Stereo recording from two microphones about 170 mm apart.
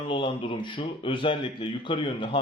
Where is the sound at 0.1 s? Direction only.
30° left (ahead or behind).